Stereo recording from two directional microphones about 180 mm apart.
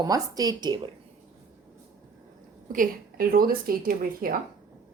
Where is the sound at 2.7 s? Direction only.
55° right (ahead or behind).